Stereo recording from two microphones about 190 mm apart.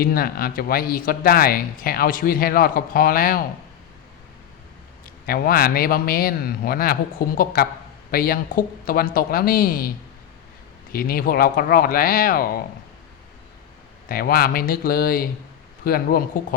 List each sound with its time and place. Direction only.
0.0 s speech: 50° left (ahead or behind)
5.2 s speech: 50° left (ahead or behind)
10.9 s speech: 50° left (ahead or behind)
14.1 s speech: 50° left (ahead or behind)